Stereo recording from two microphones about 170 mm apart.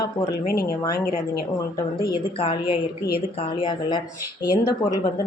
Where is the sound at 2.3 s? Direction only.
30° left (ahead or behind).